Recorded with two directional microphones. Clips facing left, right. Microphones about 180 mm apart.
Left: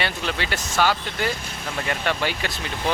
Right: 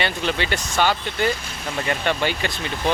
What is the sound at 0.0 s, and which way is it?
Speech, 5° left (ahead or behind).